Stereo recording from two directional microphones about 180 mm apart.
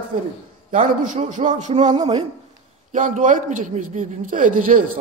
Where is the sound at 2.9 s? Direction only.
50° right (ahead or behind).